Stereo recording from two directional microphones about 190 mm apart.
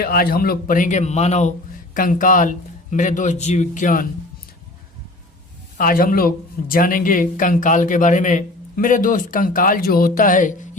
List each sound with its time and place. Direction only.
0.0 s speech: 50° left (ahead or behind)
5.7 s speech: 50° left (ahead or behind)